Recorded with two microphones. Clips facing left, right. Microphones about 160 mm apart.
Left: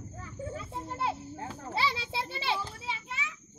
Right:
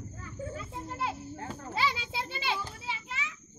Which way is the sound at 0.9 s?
25° left (ahead or behind).